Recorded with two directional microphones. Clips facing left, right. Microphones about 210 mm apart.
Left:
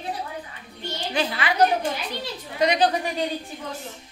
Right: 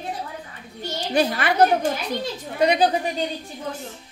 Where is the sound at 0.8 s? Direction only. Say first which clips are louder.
Right 5 dB; 40° right (ahead or behind).